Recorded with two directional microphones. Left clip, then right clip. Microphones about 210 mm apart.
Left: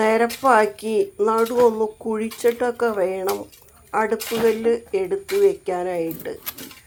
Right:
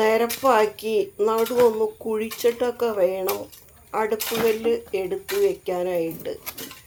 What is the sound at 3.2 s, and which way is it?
Speech, centre (ahead or behind).